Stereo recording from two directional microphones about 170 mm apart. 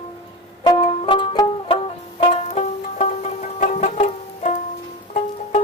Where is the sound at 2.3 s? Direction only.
40° left (ahead or behind).